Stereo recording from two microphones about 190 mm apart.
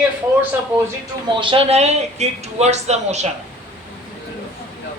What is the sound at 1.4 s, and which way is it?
A woman's voice, 30° right (ahead or behind).